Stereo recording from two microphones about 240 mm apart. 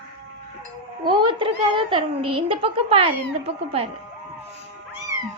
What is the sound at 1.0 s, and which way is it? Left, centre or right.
A child's voice, right.